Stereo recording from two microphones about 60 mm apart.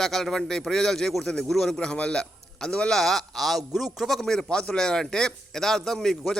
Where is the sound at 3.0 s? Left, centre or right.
Centre.